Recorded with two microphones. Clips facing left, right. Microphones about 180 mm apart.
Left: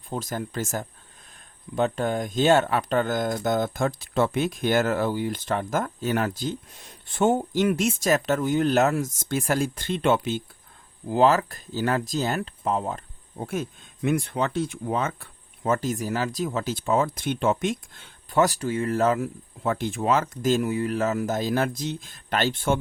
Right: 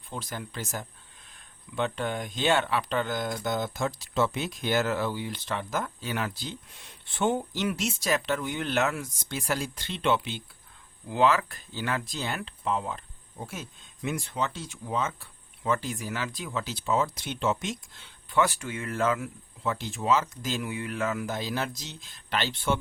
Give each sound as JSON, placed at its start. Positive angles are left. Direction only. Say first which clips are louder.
{"t": 0.1, "sound": "speech", "louder": "left 7 dB", "side_deg": 45}
{"t": 13.4, "sound": "speech", "louder": "left 9 dB", "side_deg": 55}
{"t": 19.7, "sound": "speech", "louder": "left 3 dB", "side_deg": 55}